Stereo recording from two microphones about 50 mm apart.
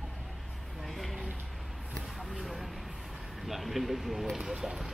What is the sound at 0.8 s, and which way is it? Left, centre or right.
Vehicle, centre.